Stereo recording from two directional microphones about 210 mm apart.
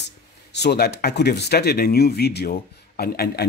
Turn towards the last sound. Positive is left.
turn(degrees=45)  # may be behind; listen again after turning